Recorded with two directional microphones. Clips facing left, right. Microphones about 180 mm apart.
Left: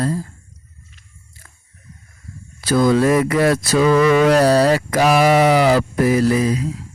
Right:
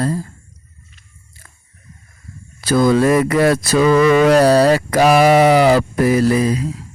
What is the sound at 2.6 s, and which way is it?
Mantra, 50° right (ahead or behind).